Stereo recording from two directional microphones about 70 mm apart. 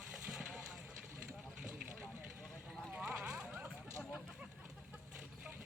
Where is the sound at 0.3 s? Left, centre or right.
Centre.